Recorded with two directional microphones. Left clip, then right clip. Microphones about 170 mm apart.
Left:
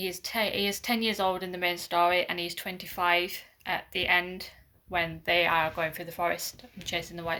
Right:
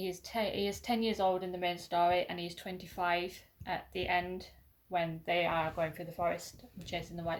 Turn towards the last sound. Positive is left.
turn(degrees=15)  # may be behind; listen again after turning